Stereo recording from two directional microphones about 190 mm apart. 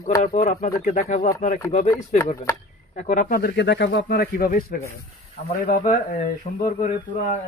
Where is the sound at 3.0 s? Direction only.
40° left (ahead or behind).